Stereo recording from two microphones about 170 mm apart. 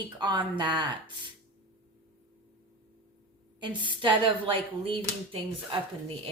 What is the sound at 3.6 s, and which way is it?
A woman's voice, 30° right (ahead or behind).